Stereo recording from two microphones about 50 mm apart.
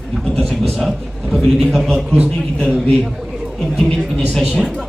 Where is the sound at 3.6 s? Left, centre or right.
Centre.